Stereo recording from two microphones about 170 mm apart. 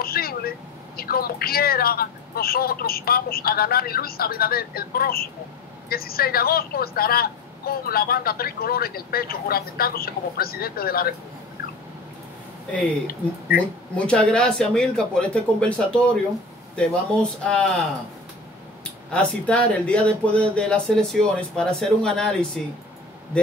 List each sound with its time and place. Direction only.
0.0 s a sound: 60° left (ahead or behind)
0.9 s a woman's voice: 60° left (ahead or behind)
13.9 s speech: 5° left (ahead or behind)
19.1 s speech: 5° left (ahead or behind)